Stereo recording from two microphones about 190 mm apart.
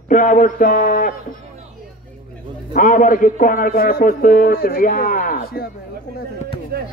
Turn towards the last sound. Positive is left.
turn(degrees=-55)  # may be behind; listen again after turning